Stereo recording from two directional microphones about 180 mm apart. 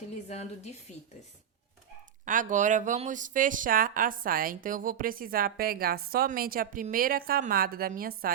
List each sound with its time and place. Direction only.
0.3 s a woman's voice: 35° left (ahead or behind)
2.2 s speech: 45° right (ahead or behind)